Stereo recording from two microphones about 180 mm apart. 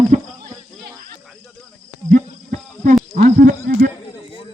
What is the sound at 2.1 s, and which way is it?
Cricket, 45° right (ahead or behind).